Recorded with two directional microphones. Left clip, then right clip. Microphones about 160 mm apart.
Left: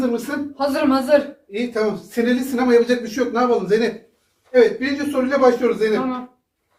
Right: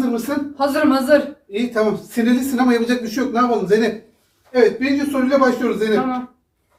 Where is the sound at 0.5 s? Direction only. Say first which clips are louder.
Right 2 dB; centre (ahead or behind).